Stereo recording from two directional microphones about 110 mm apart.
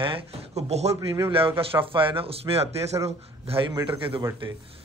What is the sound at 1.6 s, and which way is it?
A man's voice, 55° right (ahead or behind).